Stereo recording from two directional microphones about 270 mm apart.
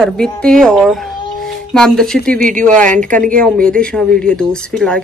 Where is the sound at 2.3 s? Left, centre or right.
Right.